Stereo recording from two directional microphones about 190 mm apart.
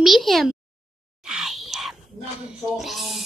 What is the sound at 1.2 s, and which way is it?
Whispering, 5° right (ahead or behind).